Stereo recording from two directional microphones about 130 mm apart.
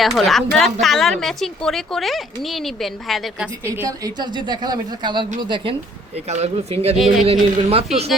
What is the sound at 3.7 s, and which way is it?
A woman's voice, 25° right (ahead or behind).